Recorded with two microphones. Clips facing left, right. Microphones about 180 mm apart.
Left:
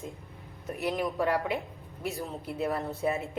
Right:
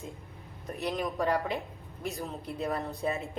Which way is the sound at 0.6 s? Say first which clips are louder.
Left 2 dB; centre (ahead or behind).